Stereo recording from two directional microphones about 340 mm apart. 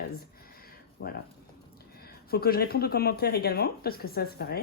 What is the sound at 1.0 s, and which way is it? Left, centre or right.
Speech, left.